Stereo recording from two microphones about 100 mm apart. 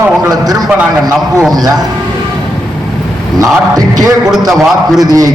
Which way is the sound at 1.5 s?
40° right (ahead or behind).